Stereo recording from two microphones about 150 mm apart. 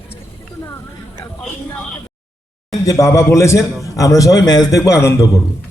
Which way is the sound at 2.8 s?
20° left (ahead or behind).